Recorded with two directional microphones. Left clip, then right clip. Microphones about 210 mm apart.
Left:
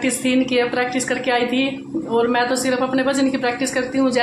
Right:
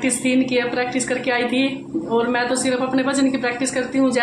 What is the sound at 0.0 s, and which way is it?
A woman's voice, 10° left (ahead or behind).